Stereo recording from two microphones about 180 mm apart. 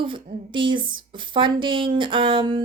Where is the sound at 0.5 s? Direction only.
25° right (ahead or behind).